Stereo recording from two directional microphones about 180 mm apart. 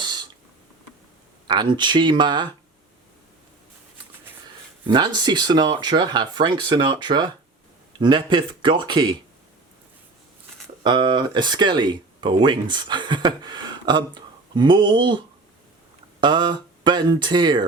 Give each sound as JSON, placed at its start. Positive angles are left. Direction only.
{"t": 0.0, "sound": "a sound", "side_deg": -25}
{"t": 1.5, "sound": "speech", "side_deg": -25}
{"t": 4.9, "sound": "speech", "side_deg": -25}
{"t": 10.8, "sound": "speech", "side_deg": -25}
{"t": 16.2, "sound": "speech", "side_deg": -25}